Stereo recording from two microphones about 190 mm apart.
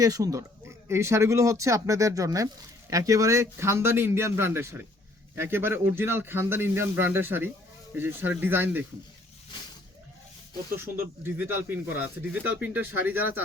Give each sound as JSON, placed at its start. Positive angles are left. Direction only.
{"t": 0.0, "sound": "speech", "side_deg": -20}
{"t": 10.8, "sound": "speech", "side_deg": -15}